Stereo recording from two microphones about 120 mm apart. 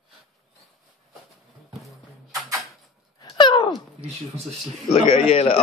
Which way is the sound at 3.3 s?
40° left (ahead or behind).